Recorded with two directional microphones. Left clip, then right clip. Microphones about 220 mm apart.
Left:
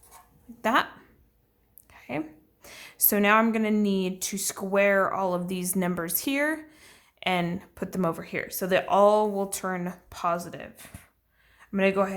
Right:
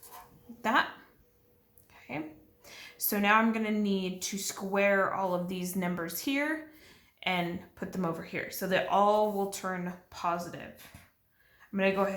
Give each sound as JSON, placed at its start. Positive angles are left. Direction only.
{"t": 0.6, "sound": "speech", "side_deg": 45}
{"t": 1.9, "sound": "a woman's voice", "side_deg": 45}